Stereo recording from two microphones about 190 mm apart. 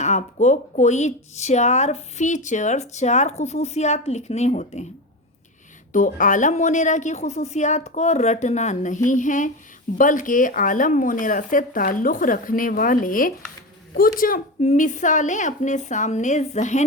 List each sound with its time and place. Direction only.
0.0 s speech: 35° left (ahead or behind)
5.9 s speech: 45° left (ahead or behind)